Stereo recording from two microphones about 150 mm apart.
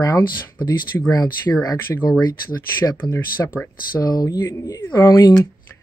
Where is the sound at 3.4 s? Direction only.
15° left (ahead or behind).